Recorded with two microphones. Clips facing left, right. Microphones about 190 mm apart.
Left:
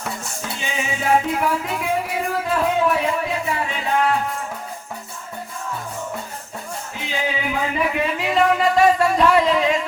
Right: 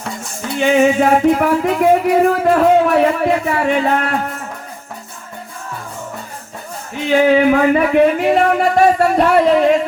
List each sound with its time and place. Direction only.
0.6 s music: 65° right (ahead or behind)
7.1 s speech: 60° right (ahead or behind)